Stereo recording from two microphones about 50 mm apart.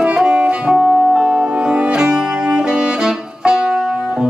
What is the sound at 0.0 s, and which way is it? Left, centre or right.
Music, centre.